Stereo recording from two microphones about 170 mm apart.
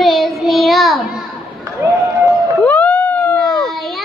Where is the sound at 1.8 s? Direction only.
15° right (ahead or behind).